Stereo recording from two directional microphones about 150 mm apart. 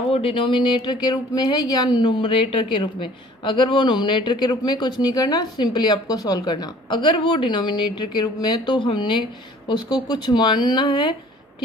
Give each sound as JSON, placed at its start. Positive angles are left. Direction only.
{"t": 0.1, "sound": "speech", "side_deg": 40}